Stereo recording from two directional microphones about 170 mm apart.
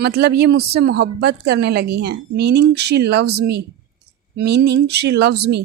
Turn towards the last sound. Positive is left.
turn(degrees=-75)  # may be behind; listen again after turning